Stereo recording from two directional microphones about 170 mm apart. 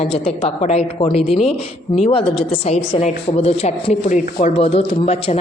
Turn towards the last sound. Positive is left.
turn(degrees=40)  # may be behind; listen again after turning